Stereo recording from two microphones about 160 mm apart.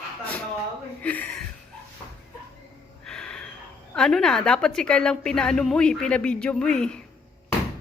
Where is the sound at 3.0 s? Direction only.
5° left (ahead or behind).